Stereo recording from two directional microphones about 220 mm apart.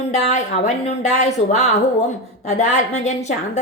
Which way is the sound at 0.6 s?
30° left (ahead or behind).